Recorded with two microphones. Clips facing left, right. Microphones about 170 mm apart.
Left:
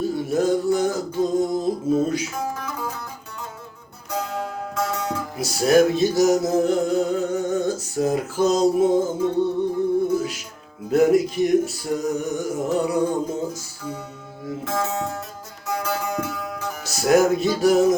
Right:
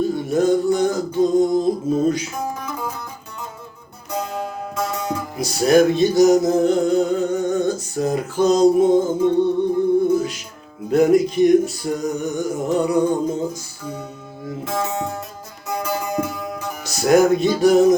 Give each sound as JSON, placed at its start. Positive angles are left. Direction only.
{"t": 0.0, "sound": "music", "side_deg": 5}
{"t": 2.5, "sound": "music", "side_deg": -15}
{"t": 4.1, "sound": "music", "side_deg": -15}
{"t": 5.4, "sound": "music", "side_deg": 5}
{"t": 10.2, "sound": "music", "side_deg": 5}
{"t": 14.6, "sound": "music", "side_deg": -15}
{"t": 16.8, "sound": "music", "side_deg": 5}